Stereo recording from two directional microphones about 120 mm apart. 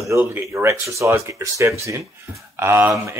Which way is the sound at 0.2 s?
20° right (ahead or behind).